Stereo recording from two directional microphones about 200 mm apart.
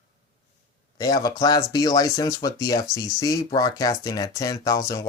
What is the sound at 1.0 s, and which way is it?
Speech, 20° left (ahead or behind).